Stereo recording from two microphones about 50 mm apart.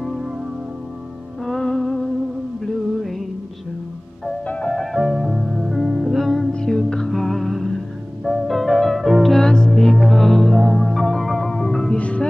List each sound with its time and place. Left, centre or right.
1.4 s music: centre
2.6 s music: centre
4.9 s music: centre
6.2 s music: centre
12.0 s music: left